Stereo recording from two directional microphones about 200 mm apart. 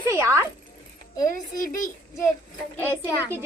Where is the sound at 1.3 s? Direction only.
45° left (ahead or behind).